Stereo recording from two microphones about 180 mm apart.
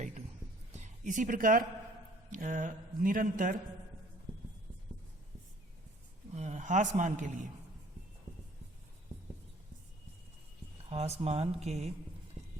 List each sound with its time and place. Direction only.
0.7 s a sound: 40° right (ahead or behind)
2.3 s speech: 45° right (ahead or behind)
6.3 s speech: 40° right (ahead or behind)
10.8 s speech: 35° right (ahead or behind)